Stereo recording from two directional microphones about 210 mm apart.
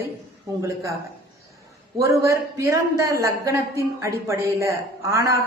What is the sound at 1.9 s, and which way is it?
A woman's voice, 15° right (ahead or behind).